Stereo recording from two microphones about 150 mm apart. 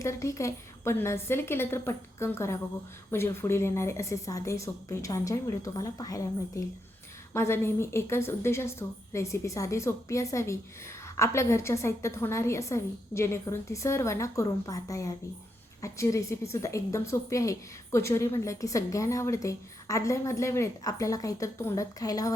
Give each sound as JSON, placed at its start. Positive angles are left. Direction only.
{"t": 0.0, "sound": "a woman's voice", "side_deg": 20}
{"t": 7.3, "sound": "a woman's voice", "side_deg": 15}